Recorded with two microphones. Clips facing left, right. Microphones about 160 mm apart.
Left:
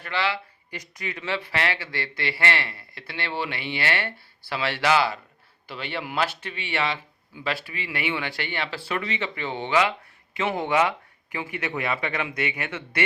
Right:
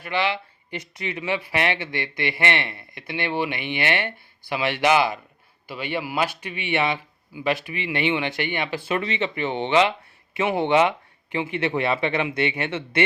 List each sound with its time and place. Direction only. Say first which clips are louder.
0.0 s speech: right 3 dB; 20° right (ahead or behind)